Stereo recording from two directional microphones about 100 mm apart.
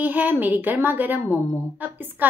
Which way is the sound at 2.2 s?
20° right (ahead or behind).